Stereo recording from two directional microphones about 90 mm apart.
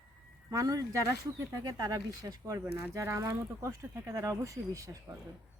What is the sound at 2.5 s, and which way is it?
Speech, 30° right (ahead or behind).